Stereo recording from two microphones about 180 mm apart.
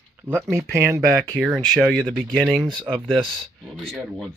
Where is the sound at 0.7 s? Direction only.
15° right (ahead or behind).